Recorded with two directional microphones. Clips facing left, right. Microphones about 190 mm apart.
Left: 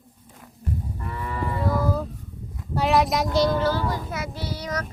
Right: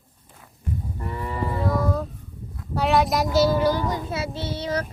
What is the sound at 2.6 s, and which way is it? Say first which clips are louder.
A child's voice: even; centre (ahead or behind).